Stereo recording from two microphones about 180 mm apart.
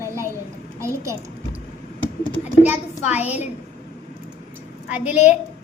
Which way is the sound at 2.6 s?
10° right (ahead or behind).